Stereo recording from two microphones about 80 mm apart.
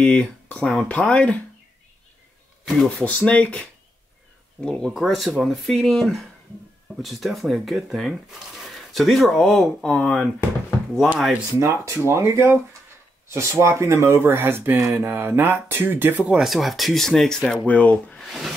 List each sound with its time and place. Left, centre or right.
0.0 s speech: centre
2.6 s speech: centre
3.1 s speech: centre
4.9 s speech: centre
11.0 s speech: centre
11.6 s speech: right
16.3 s speech: centre
17.6 s speech: centre
18.2 s a sound: centre